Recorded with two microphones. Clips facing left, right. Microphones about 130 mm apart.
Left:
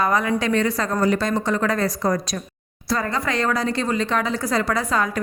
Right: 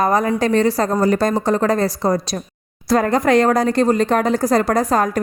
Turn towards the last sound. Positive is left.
turn(degrees=-45)  # may be behind; listen again after turning